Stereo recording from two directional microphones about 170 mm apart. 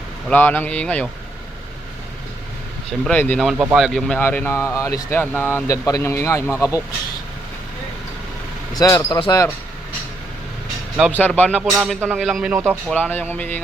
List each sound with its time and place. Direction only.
0.3 s speech: 10° left (ahead or behind)
3.0 s speech: 10° left (ahead or behind)
4.2 s speech: 10° left (ahead or behind)
8.7 s speech: 20° left (ahead or behind)
11.1 s speech: 10° left (ahead or behind)
11.5 s speech: 5° right (ahead or behind)
12.9 s speech: 10° left (ahead or behind)